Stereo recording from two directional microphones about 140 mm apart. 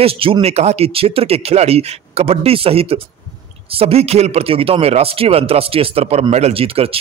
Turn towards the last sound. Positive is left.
turn(degrees=-45)  # may be behind; listen again after turning